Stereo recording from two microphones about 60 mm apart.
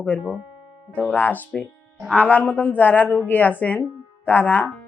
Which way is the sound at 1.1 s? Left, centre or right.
Left.